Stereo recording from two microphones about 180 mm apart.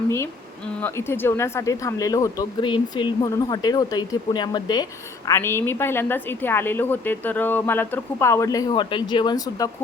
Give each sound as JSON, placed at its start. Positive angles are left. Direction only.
{"t": 0.8, "sound": "speech", "side_deg": 10}